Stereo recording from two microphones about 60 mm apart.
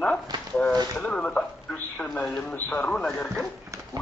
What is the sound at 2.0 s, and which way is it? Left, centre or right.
Speech, centre.